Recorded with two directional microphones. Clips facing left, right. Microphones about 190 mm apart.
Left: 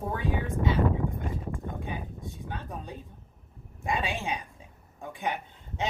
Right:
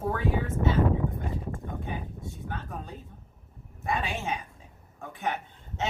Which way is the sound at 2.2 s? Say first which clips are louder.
Right 1 dB; 15° left (ahead or behind).